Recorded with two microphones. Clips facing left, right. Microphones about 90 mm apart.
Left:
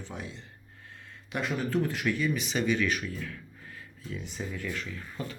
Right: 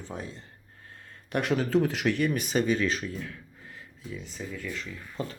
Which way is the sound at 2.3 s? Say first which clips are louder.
Right 2 dB; 45° right (ahead or behind).